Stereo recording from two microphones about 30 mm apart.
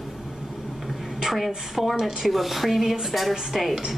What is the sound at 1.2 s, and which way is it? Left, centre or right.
Speech, centre.